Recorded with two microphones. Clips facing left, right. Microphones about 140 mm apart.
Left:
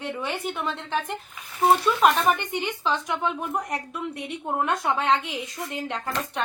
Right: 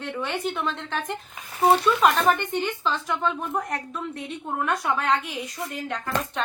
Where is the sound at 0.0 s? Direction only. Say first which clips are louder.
Right 1 dB; 5° left (ahead or behind).